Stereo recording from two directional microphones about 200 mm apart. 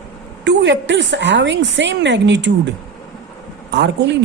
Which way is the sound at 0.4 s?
60° right (ahead or behind).